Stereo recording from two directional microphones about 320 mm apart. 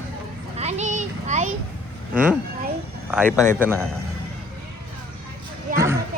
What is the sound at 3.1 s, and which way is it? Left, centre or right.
Speech, centre.